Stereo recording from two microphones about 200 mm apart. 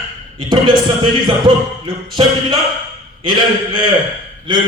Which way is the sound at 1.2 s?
25° right (ahead or behind).